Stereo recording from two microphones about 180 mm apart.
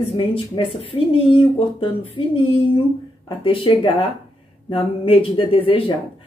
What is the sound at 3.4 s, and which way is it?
A woman's voice, 30° left (ahead or behind).